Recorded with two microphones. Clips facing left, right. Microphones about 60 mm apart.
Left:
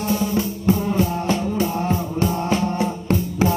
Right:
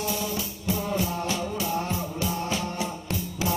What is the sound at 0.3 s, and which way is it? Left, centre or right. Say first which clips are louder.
Music: left 10 dB; left.